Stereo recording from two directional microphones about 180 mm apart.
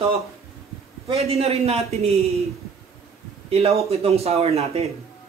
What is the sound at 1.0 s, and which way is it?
Speech, 35° right (ahead or behind).